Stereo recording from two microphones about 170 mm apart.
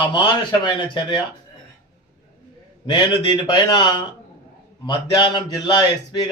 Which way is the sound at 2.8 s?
25° left (ahead or behind).